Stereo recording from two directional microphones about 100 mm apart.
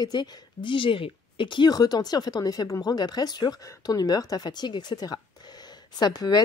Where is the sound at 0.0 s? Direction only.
45° left (ahead or behind).